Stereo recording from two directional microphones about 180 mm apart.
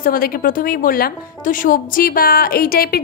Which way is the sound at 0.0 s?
55° left (ahead or behind).